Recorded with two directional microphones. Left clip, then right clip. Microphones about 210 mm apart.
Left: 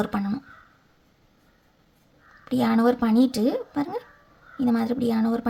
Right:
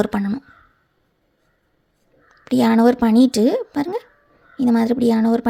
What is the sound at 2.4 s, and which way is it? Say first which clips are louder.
Speech: right 7 dB; 35° right (ahead or behind).